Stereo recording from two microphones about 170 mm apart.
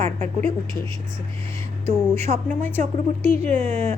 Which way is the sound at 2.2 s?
40° right (ahead or behind).